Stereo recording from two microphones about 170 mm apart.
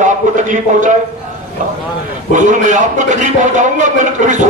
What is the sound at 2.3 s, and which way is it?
A man's voice, 45° right (ahead or behind).